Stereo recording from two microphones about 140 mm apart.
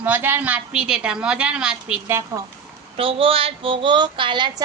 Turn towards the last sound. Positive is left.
turn(degrees=-35)  # may be behind; listen again after turning